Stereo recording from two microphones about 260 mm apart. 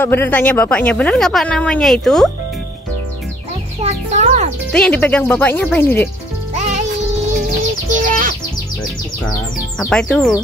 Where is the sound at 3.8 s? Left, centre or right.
Right.